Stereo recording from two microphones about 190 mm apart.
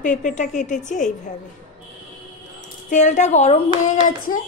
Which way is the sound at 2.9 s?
40° left (ahead or behind).